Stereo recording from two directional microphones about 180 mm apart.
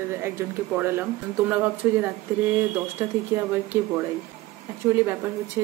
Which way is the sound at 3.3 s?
20° right (ahead or behind).